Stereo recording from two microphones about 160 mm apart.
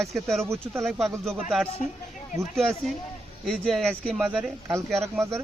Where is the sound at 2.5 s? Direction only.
Centre (ahead or behind).